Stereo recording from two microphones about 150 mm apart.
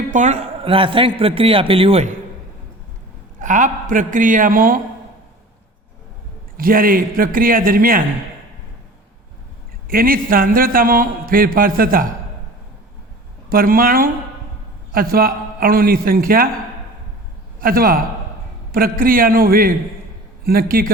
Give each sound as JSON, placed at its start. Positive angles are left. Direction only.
{"t": 0.1, "sound": "a man's voice", "side_deg": -50}
{"t": 3.4, "sound": "a man's voice", "side_deg": -60}
{"t": 6.6, "sound": "a man's voice", "side_deg": -75}
{"t": 9.9, "sound": "a man's voice", "side_deg": -75}
{"t": 13.5, "sound": "a man's voice", "side_deg": -75}
{"t": 17.6, "sound": "a man's voice", "side_deg": -80}
{"t": 20.4, "sound": "a man's voice", "side_deg": -85}